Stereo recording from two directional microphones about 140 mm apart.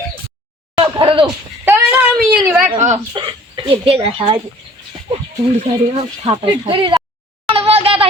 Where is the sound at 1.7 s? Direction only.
15° right (ahead or behind).